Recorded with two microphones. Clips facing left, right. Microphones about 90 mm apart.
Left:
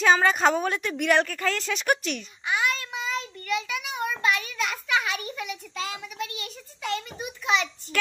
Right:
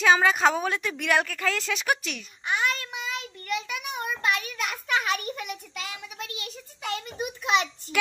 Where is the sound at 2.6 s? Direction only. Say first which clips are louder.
Even; 45° right (ahead or behind).